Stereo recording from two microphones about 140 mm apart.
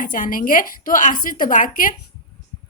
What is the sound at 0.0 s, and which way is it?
A woman's voice, 75° left (ahead or behind).